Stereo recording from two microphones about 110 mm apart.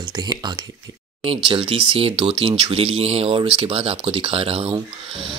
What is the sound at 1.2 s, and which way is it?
Speech, 55° right (ahead or behind).